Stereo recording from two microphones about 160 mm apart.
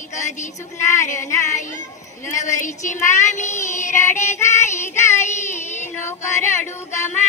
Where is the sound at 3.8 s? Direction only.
15° left (ahead or behind).